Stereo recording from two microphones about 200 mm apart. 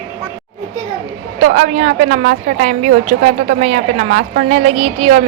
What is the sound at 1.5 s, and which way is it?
A woman's voice, 35° right (ahead or behind).